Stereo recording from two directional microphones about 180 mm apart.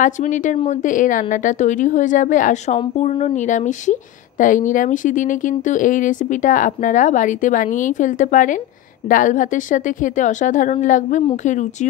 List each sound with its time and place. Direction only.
0.0 s speech: 45° left (ahead or behind)